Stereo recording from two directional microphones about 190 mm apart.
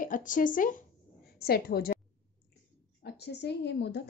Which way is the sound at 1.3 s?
55° left (ahead or behind).